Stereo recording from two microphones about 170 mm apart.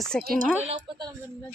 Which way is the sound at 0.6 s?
30° right (ahead or behind).